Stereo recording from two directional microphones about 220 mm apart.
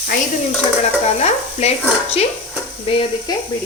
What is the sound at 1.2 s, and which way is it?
Stir, 30° left (ahead or behind).